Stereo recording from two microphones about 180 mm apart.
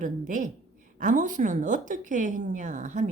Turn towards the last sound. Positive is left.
turn(degrees=-40)  # may be behind; listen again after turning